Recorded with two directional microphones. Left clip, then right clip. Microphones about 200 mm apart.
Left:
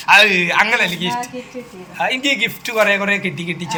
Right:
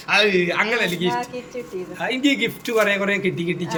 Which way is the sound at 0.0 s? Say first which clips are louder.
Left 7 dB; 5° right (ahead or behind).